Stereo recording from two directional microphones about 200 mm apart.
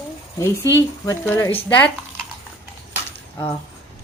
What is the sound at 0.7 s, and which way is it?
Speech, 15° left (ahead or behind).